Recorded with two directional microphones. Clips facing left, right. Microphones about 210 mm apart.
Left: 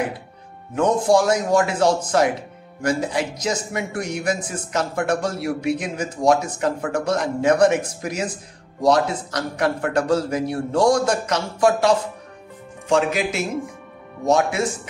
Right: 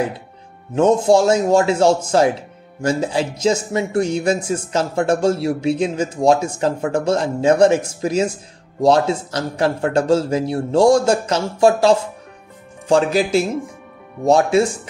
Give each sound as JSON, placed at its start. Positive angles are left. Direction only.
{"t": 0.7, "sound": "a man's voice", "side_deg": -25}